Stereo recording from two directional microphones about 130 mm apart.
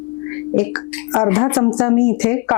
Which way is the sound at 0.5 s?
20° left (ahead or behind).